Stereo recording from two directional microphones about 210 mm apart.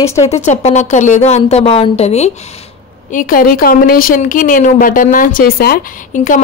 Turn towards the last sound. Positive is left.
turn(degrees=40)  # may be behind; listen again after turning